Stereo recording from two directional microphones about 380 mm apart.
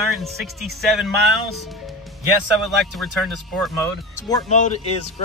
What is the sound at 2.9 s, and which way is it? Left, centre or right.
Speech, centre.